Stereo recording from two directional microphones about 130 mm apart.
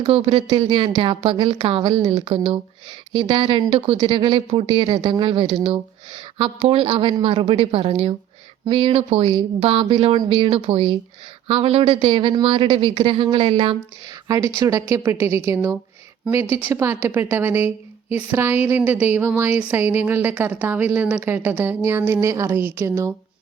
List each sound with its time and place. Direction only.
0.0 s speech: 50° right (ahead or behind)
2.0 s a woman's voice: 60° right (ahead or behind)
2.2 s speech: 50° right (ahead or behind)
5.5 s speech: 50° right (ahead or behind)
14.3 s a woman's voice: 25° right (ahead or behind)